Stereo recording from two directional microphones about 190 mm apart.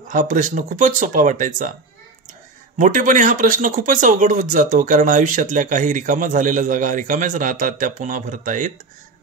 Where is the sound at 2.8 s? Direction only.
45° right (ahead or behind).